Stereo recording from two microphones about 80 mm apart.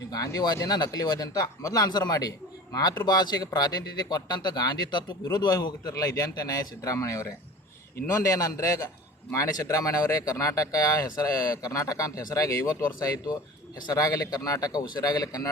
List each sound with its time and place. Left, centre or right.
0.3 s speech: left
5.8 s speech: left